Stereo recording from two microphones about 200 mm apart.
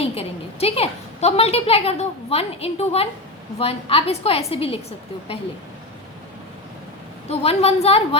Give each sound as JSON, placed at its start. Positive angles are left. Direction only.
{"t": 0.0, "sound": "a woman's voice", "side_deg": 30}
{"t": 7.3, "sound": "a woman's voice", "side_deg": 30}